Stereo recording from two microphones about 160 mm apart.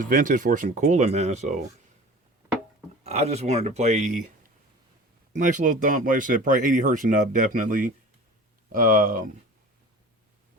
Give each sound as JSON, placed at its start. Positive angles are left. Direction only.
{"t": 0.0, "sound": "speech", "side_deg": -55}
{"t": 3.0, "sound": "speech", "side_deg": -40}
{"t": 5.3, "sound": "speech", "side_deg": -50}